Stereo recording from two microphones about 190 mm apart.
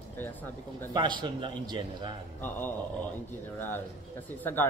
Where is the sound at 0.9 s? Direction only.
25° right (ahead or behind).